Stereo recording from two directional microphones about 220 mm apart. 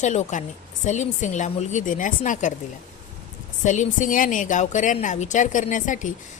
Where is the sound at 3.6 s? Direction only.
35° left (ahead or behind).